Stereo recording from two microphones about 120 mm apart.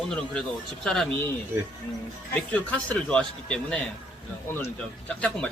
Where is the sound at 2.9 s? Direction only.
10° left (ahead or behind).